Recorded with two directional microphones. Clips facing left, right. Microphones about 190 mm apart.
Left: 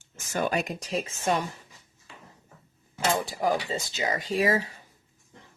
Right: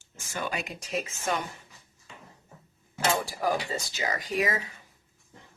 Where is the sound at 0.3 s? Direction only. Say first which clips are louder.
Left 6 dB; 45° left (ahead or behind); by 1.5 s 30° left (ahead or behind).